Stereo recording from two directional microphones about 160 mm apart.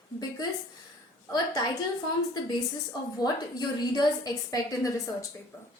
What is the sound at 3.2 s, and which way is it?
A woman's voice, 25° left (ahead or behind).